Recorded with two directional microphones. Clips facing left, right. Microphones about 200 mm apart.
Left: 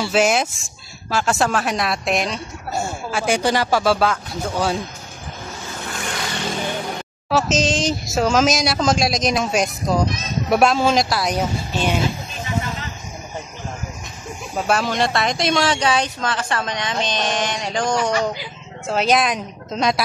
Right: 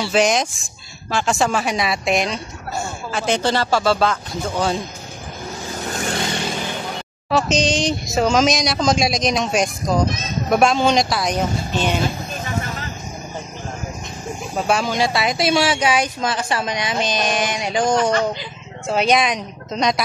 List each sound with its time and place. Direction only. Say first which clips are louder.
0.0 s speech: even; 5° left (ahead or behind)
5.9 s vehicle: right 5 dB; 40° right (ahead or behind)
7.2 s speech: right 1 dB; 5° left (ahead or behind)
14.7 s speech: even; centre (ahead or behind)
18.1 s speech: right 1 dB; 5° left (ahead or behind)